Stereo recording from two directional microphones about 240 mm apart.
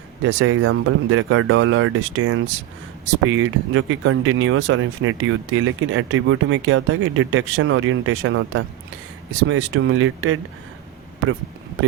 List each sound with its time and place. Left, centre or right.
0.2 s speech: right